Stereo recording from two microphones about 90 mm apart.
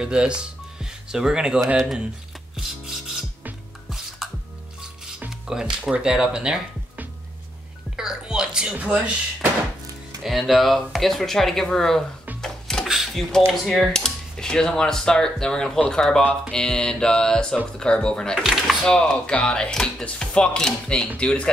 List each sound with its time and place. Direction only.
0.0 s speech: 10° right (ahead or behind)
2.5 s filing: 5° right (ahead or behind)
5.5 s speech: 5° right (ahead or behind)
7.9 s music: 10° right (ahead or behind)
10.2 s speech: centre (ahead or behind)
12.4 s music: 5° left (ahead or behind)
12.8 s a sound: 5° right (ahead or behind)
13.5 s speech: 5° left (ahead or behind)
18.4 s door: centre (ahead or behind)
18.9 s speech: 10° left (ahead or behind)